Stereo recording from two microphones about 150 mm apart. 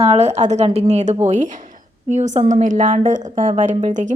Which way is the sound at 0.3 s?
50° right (ahead or behind).